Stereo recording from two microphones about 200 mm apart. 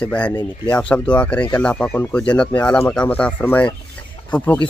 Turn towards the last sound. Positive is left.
turn(degrees=10)  # may be behind; listen again after turning